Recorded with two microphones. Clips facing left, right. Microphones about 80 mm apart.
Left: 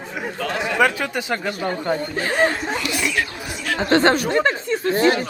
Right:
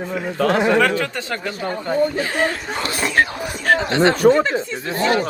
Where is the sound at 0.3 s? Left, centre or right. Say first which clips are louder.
Right 9 dB; right.